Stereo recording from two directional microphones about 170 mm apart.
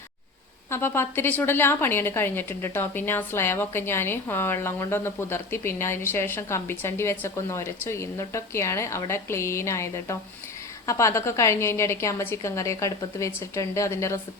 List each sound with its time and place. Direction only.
0.7 s a woman's voice: 15° left (ahead or behind)